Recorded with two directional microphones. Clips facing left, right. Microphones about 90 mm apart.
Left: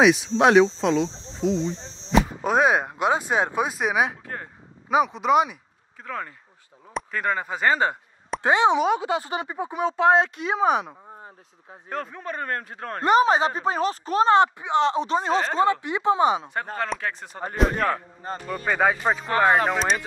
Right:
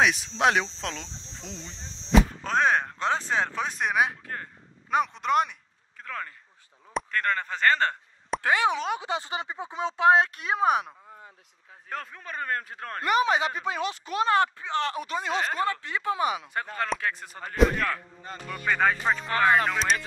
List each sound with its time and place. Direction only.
0.0 s speech: 5° left (ahead or behind)
6.9 s a sound: 5° left (ahead or behind)
8.4 s speech: 20° left (ahead or behind)
9.2 s speech: 25° right (ahead or behind)
10.0 s speech: centre (ahead or behind)
13.0 s speech: 35° left (ahead or behind)
14.4 s speech: 20° left (ahead or behind)
15.6 s speech: 20° left (ahead or behind)
16.9 s speech: centre (ahead or behind)
17.6 s speech: 35° left (ahead or behind)
18.7 s speech: 10° left (ahead or behind)